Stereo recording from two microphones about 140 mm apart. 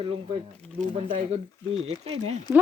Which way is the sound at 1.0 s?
40° right (ahead or behind).